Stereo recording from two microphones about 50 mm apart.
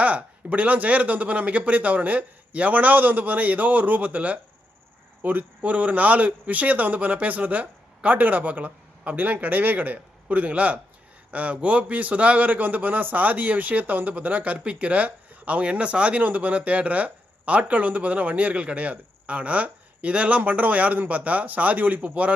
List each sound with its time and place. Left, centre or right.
0.0 s speech: right